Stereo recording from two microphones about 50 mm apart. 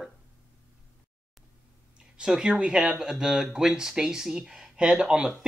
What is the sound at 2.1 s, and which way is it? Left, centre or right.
Speech, centre.